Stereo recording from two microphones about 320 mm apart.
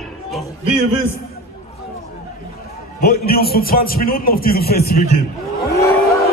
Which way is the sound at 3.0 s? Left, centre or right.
Left.